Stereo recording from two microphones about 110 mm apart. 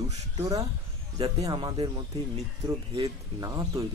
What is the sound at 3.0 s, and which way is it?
Speech, 35° right (ahead or behind).